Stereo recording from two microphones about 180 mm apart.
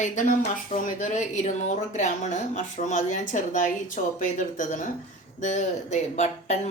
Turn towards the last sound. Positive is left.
turn(degrees=40)  # may be behind; listen again after turning